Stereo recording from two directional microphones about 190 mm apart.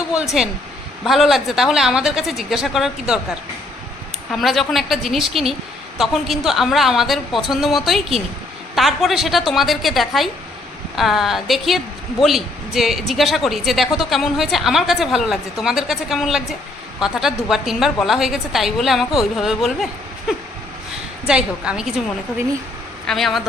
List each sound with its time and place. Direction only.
0.1 s a woman's voice: 5° right (ahead or behind)
4.3 s a woman's voice: centre (ahead or behind)
23.0 s a woman's voice: centre (ahead or behind)